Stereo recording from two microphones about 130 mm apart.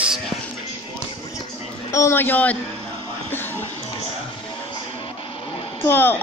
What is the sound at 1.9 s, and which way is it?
Speech, 20° left (ahead or behind).